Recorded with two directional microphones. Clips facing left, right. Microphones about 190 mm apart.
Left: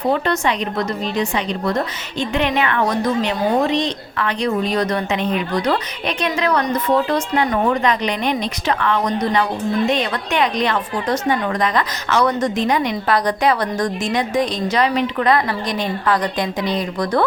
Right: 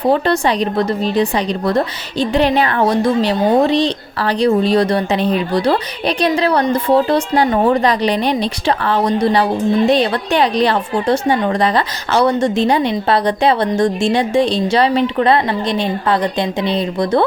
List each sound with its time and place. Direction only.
0.1 s speech: 35° right (ahead or behind)